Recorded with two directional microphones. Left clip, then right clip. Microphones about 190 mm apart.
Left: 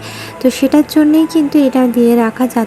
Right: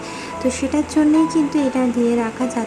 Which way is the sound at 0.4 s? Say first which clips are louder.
Left 9 dB; 25° left (ahead or behind).